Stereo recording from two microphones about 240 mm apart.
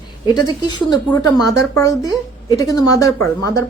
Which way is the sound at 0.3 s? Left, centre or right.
Centre.